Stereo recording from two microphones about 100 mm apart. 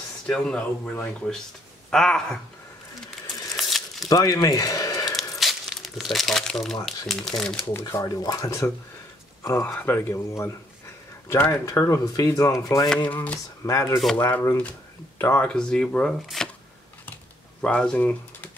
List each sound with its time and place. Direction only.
0.3 s speech: 5° left (ahead or behind)
3.1 s crumpling: centre (ahead or behind)
4.1 s speech: 40° left (ahead or behind)
5.4 s crumpling: centre (ahead or behind)
7.1 s speech: 5° left (ahead or behind)
7.9 s speech: 35° left (ahead or behind)
11.6 s speech: 30° left (ahead or behind)
12.6 s speech: 40° left (ahead or behind)
13.0 s speech: 15° left (ahead or behind)
13.7 s speech: 30° left (ahead or behind)
14.1 s speech: 20° left (ahead or behind); by 16.4 s 5° left (ahead or behind)
17.6 s speech: 10° left (ahead or behind)